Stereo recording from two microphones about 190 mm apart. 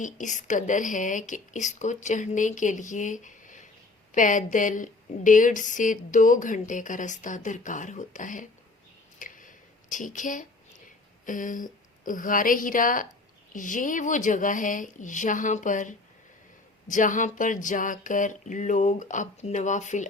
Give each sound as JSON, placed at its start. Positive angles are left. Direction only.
{"t": 0.0, "sound": "a woman's voice", "side_deg": 40}
{"t": 9.1, "sound": "a sound", "side_deg": 45}
{"t": 11.3, "sound": "a woman's voice", "side_deg": 45}